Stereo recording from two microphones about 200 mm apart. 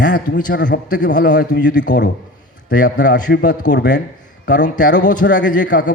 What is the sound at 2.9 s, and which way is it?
Speech, 60° left (ahead or behind).